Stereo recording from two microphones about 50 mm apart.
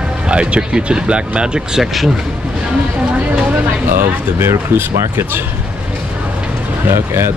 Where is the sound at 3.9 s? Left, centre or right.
Right.